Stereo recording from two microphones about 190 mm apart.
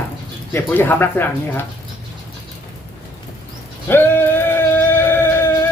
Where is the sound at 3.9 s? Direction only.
10° left (ahead or behind).